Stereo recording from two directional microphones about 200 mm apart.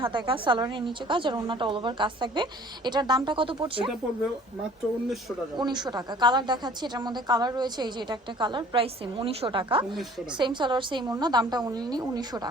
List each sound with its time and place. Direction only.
0.0 s a woman's voice: 25° right (ahead or behind)
5.5 s a woman's voice: 20° right (ahead or behind)